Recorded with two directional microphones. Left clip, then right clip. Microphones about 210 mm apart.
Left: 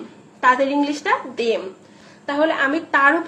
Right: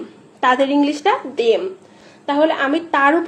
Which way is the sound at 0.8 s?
30° right (ahead or behind).